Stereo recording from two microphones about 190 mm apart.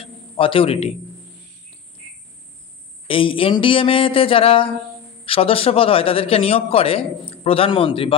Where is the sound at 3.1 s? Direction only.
30° left (ahead or behind).